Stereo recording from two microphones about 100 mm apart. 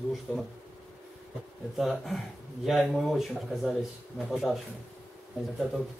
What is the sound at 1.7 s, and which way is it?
Speech, centre (ahead or behind).